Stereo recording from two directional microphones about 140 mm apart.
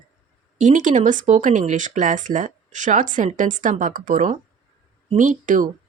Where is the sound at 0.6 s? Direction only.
65° right (ahead or behind).